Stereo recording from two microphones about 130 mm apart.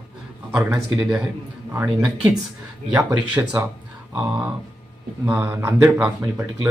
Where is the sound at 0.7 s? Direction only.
10° right (ahead or behind).